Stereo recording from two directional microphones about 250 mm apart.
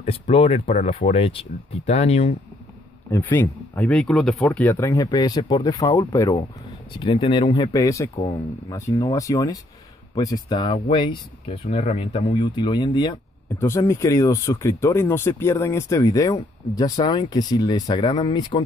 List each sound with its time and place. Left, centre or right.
0.0 s speech: left
3.1 s speech: centre